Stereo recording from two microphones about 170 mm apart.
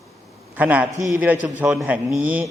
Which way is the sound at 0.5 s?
10° right (ahead or behind).